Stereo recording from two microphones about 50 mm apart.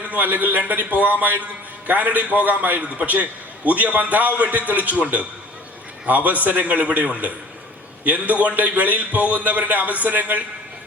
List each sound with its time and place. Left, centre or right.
0.1 s a man's voice: right